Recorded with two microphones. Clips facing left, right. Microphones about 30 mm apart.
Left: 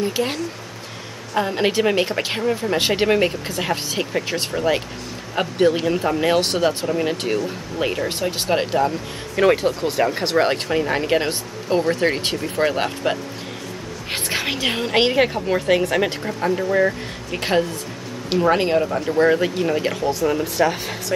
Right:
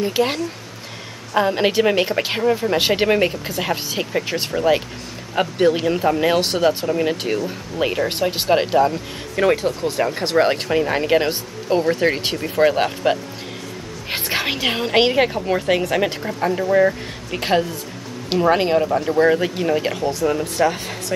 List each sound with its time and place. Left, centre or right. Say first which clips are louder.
0.0 s a woman's voice: right 3 dB; centre
8.1 s speech: right 3 dB; centre
9.3 s speech: left 1 dB; centre
9.6 s speech: left 1 dB; centre
9.9 s a woman's voice: right 2 dB; centre